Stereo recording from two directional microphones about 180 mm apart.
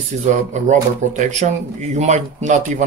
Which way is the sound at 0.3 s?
40° right (ahead or behind).